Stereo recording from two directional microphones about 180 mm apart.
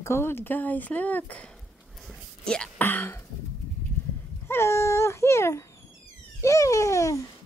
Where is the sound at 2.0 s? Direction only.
5° left (ahead or behind).